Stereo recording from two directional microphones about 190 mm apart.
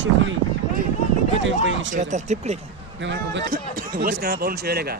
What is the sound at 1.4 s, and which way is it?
Speech, 80° right.